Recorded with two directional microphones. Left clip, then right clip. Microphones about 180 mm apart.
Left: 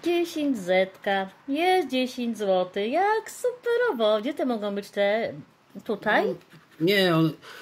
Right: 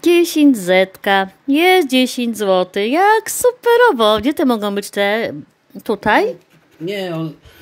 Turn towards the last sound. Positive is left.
turn(degrees=45)  # may be behind; listen again after turning